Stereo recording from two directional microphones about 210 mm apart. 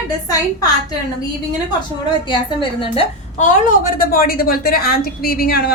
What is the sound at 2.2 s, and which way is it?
A woman's voice, 25° left (ahead or behind).